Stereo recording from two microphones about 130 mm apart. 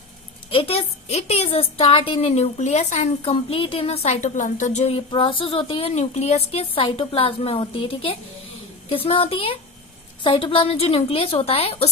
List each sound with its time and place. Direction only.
0.5 s a woman's voice: 50° left (ahead or behind)
2.3 s a woman's voice: 60° left (ahead or behind); by 5.9 s 45° left (ahead or behind)
5.9 s a woman's voice: 60° left (ahead or behind)